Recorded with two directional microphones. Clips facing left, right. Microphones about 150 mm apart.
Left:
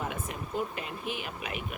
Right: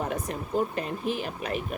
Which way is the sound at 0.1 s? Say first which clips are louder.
Right 6 dB; 40° right (ahead or behind).